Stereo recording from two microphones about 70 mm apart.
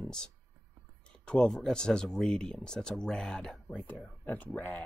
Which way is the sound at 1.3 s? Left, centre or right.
Centre.